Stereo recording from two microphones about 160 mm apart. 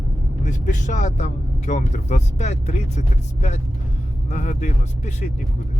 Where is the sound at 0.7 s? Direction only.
50° left (ahead or behind).